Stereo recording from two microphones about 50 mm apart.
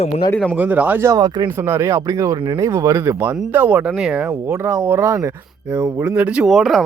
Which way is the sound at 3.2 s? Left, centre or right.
Right.